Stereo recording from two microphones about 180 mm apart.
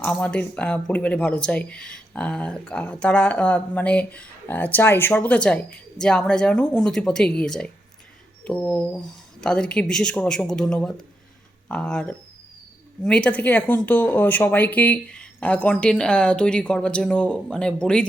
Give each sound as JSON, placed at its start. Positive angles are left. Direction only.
{"t": 0.0, "sound": "speech", "side_deg": 5}